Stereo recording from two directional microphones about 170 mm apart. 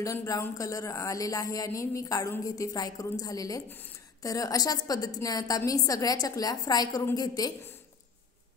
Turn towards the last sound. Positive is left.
turn(degrees=20)  # may be behind; listen again after turning